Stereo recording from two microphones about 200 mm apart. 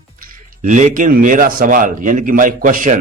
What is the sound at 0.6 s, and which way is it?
Speech, 35° right (ahead or behind).